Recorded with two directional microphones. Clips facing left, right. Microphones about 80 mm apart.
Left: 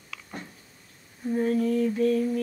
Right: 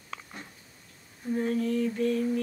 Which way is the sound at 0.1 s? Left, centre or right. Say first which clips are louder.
Right 3 dB; right.